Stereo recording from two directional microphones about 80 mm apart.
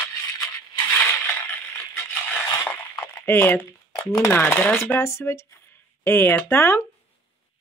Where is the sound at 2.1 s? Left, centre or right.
Left.